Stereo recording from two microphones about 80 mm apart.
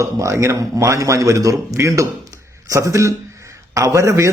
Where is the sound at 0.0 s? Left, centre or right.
Right.